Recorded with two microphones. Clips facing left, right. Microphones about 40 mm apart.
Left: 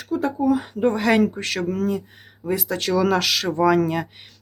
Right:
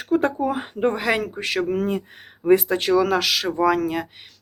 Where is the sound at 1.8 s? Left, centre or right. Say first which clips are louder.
Even; right.